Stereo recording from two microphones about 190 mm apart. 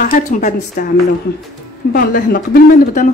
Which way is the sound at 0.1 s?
45° left (ahead or behind).